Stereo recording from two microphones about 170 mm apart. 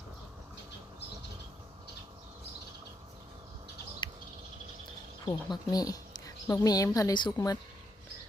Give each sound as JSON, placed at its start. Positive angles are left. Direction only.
{"t": 5.2, "sound": "speech", "side_deg": 25}